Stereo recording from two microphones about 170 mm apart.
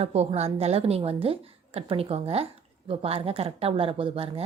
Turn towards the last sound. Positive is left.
turn(degrees=-35)  # may be behind; listen again after turning